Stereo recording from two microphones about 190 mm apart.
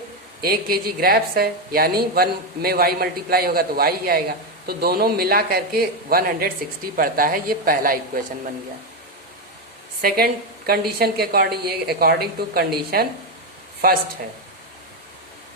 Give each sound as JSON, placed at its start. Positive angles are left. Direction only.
{"t": 0.4, "sound": "a woman's voice", "side_deg": -50}
{"t": 10.0, "sound": "a woman's voice", "side_deg": -50}